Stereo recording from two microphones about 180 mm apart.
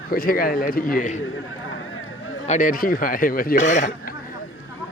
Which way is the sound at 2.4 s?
45° left (ahead or behind).